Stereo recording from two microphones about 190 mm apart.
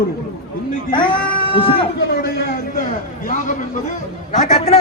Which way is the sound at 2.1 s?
55° left (ahead or behind).